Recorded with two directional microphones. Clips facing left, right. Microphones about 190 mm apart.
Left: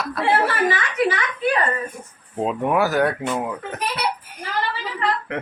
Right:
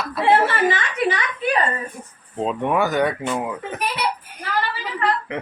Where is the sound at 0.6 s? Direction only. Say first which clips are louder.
Even; 20° right (ahead or behind).